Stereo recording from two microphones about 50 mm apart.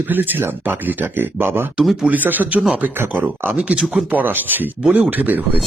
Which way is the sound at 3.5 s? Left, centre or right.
Right.